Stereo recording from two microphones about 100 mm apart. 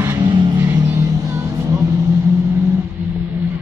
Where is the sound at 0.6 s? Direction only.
25° right (ahead or behind).